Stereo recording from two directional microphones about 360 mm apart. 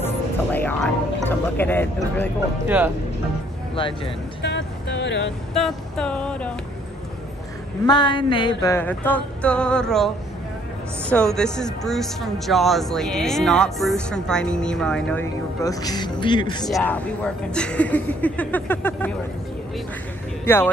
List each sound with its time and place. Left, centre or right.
0.0 s music: centre
1.6 s speech: centre
3.7 s speech: centre
4.4 s music: left
5.5 s a sound: centre
7.8 s speech: centre
20.4 s speech: centre